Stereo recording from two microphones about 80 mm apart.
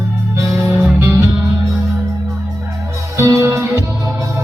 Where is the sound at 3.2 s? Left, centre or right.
Right.